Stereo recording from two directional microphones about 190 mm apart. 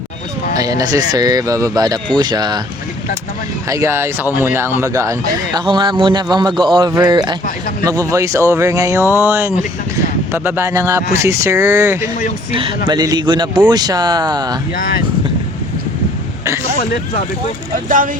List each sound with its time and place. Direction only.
0.5 s a man's voice: 20° right (ahead or behind)
3.7 s a man's voice: 15° right (ahead or behind)
14.8 s speech: 50° left (ahead or behind)
17.8 s speech: 45° right (ahead or behind)